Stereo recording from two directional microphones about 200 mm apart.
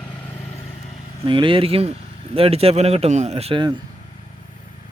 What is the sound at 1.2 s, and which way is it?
Speech, 25° right (ahead or behind).